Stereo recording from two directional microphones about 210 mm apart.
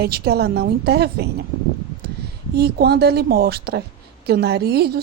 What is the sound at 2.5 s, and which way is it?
Speech, 50° right (ahead or behind).